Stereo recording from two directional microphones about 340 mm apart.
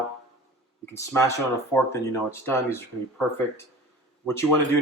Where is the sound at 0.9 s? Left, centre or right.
Centre.